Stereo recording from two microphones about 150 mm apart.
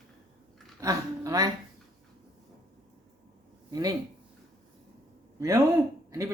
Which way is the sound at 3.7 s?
25° right (ahead or behind).